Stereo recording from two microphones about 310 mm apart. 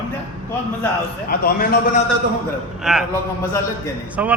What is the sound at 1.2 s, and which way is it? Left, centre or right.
Speech, left.